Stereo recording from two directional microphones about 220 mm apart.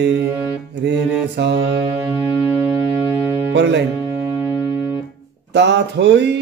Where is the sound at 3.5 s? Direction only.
50° right (ahead or behind).